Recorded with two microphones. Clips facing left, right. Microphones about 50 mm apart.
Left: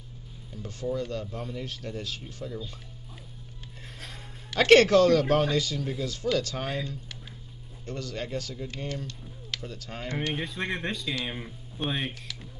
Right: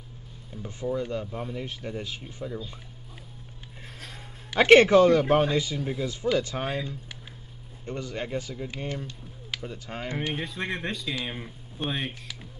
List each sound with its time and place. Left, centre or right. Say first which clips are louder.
0.5 s speech: right 1 dB; centre
4.5 s a man's voice: right 2 dB; centre
10.3 s speech: even; centre